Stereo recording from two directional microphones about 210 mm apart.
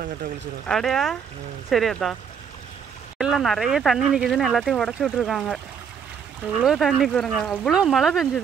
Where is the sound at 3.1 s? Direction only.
Centre (ahead or behind).